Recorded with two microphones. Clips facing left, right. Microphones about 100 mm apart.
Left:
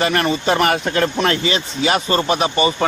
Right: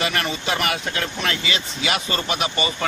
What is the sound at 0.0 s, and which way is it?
A man's voice, 40° left (ahead or behind).